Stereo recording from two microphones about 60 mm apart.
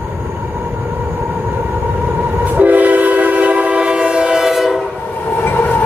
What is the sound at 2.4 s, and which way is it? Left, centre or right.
Train, right.